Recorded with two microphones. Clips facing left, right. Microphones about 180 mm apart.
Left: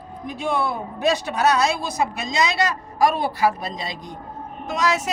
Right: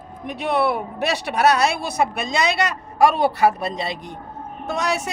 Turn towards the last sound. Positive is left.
turn(degrees=-65)  # may be behind; listen again after turning